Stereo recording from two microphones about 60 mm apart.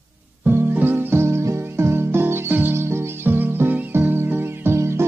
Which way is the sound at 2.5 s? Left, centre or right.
Right.